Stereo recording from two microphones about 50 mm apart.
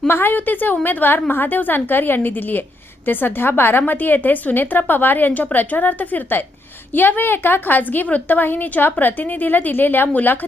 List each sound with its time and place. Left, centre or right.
0.1 s a woman's voice: left